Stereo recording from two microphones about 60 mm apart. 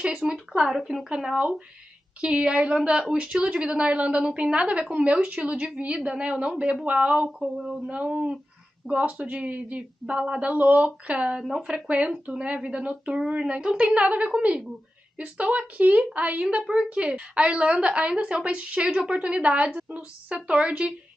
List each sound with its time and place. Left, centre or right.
0.1 s speech: centre
7.9 s speech: centre